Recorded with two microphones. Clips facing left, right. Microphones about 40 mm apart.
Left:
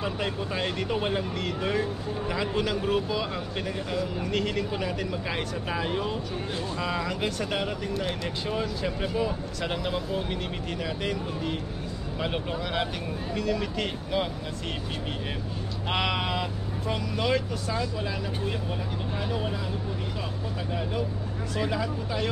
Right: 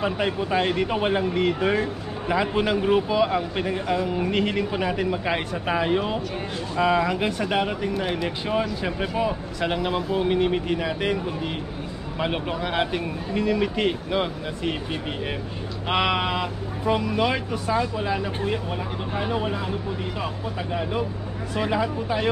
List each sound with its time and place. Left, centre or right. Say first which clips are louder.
0.0 s speech: right 6 dB; right
12.2 s speech: right 5 dB; right
15.9 s speech: right 5 dB; centre
21.5 s speech: right 5 dB; right